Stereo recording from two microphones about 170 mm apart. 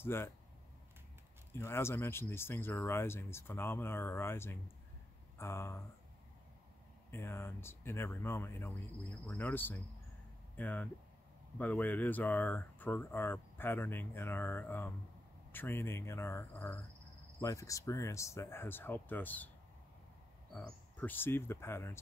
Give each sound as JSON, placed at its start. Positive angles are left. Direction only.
{"t": 0.0, "sound": "speech", "side_deg": 15}
{"t": 1.5, "sound": "speech", "side_deg": 15}
{"t": 7.1, "sound": "speech", "side_deg": 15}
{"t": 20.5, "sound": "speech", "side_deg": 10}